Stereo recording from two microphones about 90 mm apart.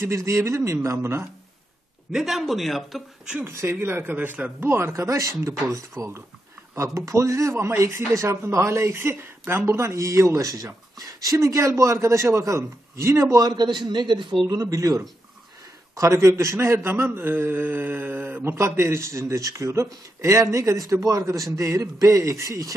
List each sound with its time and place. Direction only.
0.0 s speech: 35° right (ahead or behind)
2.1 s speech: 5° right (ahead or behind)
3.4 s speech: 25° right (ahead or behind); by 14.3 s 60° right (ahead or behind)
14.5 s speech: 40° right (ahead or behind)